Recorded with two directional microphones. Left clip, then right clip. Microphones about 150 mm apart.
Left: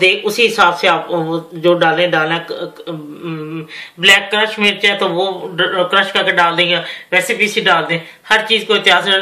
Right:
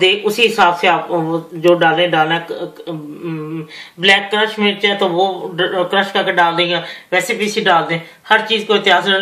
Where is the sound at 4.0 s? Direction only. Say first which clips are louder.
Left 2 dB; 35° right (ahead or behind).